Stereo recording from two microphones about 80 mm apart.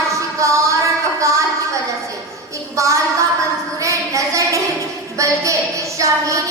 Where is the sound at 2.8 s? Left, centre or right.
Right.